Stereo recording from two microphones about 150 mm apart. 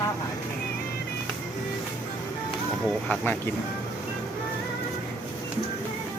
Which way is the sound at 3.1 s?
10° left (ahead or behind).